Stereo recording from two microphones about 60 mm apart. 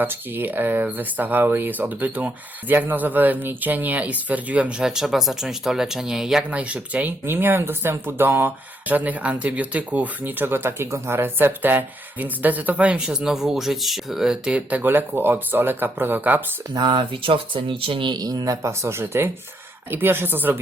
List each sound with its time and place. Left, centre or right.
0.0 s speech: right
4.8 s speech: centre
6.5 s speech: right
7.3 s speech: right; by 13.2 s centre
13.2 s speech: centre
14.5 s speech: right
18.2 s speech: right
18.7 s speech: right